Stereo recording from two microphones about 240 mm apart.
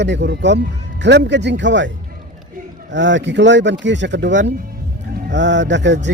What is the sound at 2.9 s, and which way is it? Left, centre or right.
A man's voice, right.